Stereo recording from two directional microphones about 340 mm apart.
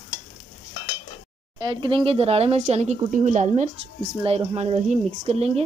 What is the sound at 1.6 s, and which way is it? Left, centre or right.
Speech, centre.